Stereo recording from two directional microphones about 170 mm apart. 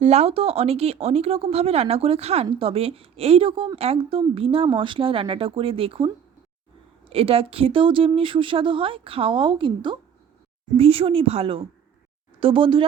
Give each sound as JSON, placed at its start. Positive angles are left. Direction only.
{"t": 0.0, "sound": "speech", "side_deg": -40}
{"t": 7.1, "sound": "speech", "side_deg": -35}